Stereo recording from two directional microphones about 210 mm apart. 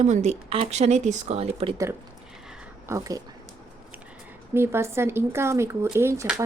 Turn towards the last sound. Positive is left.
turn(degrees=-15)  # may be behind; listen again after turning